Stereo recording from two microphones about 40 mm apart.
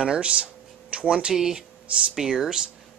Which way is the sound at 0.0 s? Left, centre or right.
Right.